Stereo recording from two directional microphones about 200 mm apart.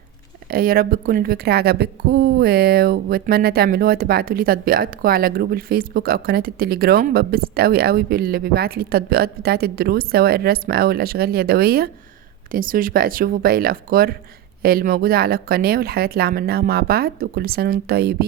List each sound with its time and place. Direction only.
0.5 s speech: 45° right (ahead or behind)